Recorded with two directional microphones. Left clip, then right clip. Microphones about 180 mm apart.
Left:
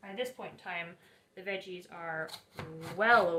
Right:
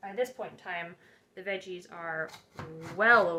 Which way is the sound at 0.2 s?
45° right (ahead or behind).